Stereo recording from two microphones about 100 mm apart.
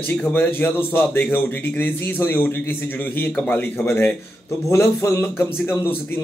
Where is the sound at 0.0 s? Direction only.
20° left (ahead or behind).